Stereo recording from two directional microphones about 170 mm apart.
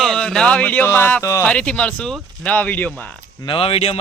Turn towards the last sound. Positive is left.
turn(degrees=35)  # may be behind; listen again after turning